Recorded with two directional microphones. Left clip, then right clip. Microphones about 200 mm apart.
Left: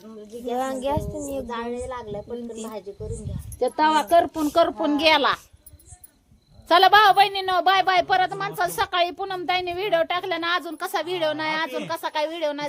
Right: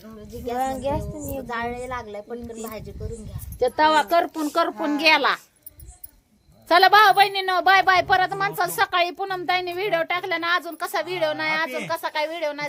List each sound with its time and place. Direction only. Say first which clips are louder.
0.5 s speech: even; 20° left (ahead or behind)
1.5 s a woman's voice: right 1 dB; centre (ahead or behind)
6.7 s a woman's voice: even; 5° left (ahead or behind)